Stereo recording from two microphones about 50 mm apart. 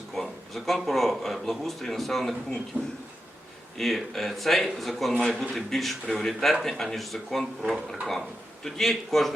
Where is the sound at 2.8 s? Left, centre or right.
Centre.